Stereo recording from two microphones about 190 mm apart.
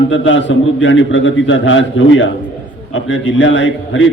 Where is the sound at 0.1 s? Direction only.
75° left (ahead or behind).